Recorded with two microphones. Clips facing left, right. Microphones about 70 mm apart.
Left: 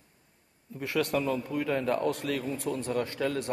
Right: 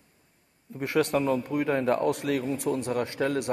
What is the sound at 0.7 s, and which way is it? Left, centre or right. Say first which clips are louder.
A man's voice: right 4 dB; right.